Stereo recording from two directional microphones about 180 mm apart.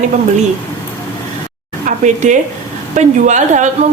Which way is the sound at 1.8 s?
40° right (ahead or behind).